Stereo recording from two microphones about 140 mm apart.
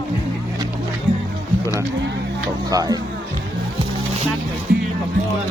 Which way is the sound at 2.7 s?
25° right (ahead or behind).